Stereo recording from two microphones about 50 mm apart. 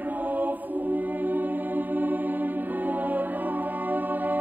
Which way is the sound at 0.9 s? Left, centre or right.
Right.